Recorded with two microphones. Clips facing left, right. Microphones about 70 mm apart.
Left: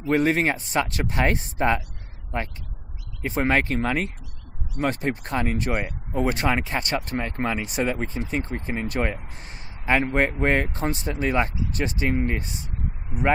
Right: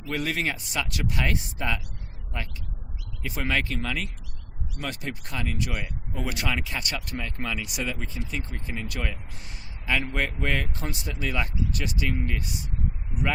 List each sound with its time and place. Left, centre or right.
0.0 s speech: left